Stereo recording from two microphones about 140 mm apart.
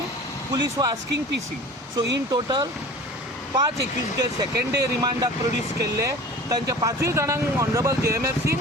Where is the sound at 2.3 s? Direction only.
30° right (ahead or behind).